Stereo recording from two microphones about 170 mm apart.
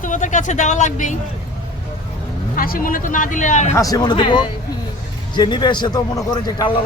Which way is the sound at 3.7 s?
20° left (ahead or behind).